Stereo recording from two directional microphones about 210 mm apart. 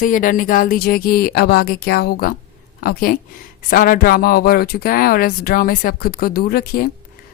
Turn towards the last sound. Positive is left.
turn(degrees=45)  # may be behind; listen again after turning